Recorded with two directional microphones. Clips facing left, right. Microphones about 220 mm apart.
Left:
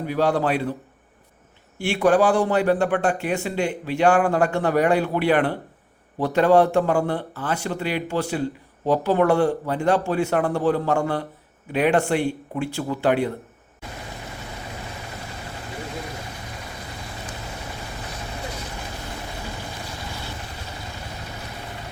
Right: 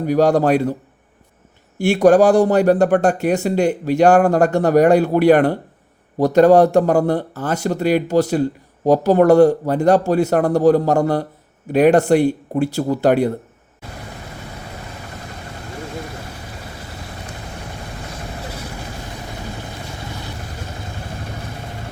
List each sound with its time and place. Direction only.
0.0 s a man's voice: 40° right (ahead or behind)
1.8 s speech: 40° right (ahead or behind)